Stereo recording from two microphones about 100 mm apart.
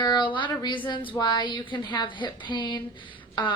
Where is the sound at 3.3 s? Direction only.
50° left (ahead or behind).